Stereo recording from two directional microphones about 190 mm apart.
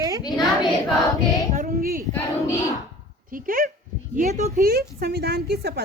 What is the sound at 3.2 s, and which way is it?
Speech, 45° right (ahead or behind).